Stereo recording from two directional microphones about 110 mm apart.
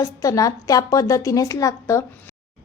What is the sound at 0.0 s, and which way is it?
Speech, 30° left (ahead or behind).